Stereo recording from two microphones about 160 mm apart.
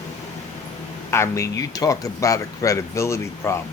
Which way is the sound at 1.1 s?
15° left (ahead or behind).